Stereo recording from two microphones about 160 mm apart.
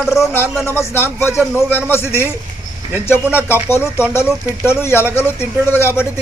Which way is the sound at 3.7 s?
15° left (ahead or behind).